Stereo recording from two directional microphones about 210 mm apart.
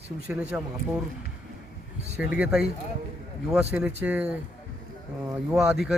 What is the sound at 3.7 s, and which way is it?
Speech, 5° right (ahead or behind).